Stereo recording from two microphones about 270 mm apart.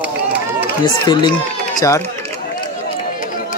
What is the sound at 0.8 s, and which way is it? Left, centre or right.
Speech, centre.